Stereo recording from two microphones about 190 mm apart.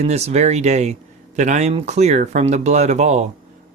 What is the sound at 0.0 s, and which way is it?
Speech, 35° right (ahead or behind).